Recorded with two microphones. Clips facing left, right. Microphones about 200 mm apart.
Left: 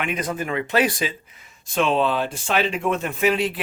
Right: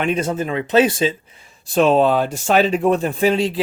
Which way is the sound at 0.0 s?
30° right (ahead or behind).